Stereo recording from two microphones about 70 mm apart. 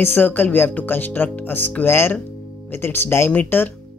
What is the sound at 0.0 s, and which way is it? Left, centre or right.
Speech, left.